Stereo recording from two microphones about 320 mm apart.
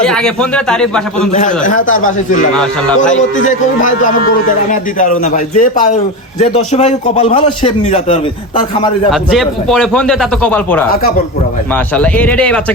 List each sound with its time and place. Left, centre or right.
0.0 s a man's voice: centre
1.4 s a man's voice: left
3.4 s a man's voice: left
9.3 s a man's voice: centre
11.9 s a man's voice: centre